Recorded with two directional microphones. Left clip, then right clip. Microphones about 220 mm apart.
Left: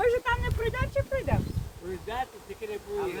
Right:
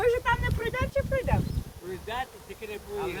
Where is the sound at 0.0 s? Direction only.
40° right (ahead or behind).